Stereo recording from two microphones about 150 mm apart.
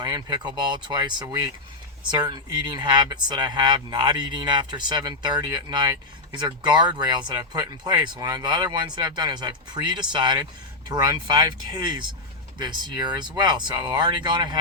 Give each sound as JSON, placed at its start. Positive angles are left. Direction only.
{"t": 0.0, "sound": "speech", "side_deg": -30}
{"t": 6.4, "sound": "speech", "side_deg": -30}